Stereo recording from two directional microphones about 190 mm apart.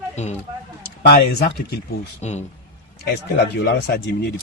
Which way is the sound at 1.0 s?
55° left (ahead or behind).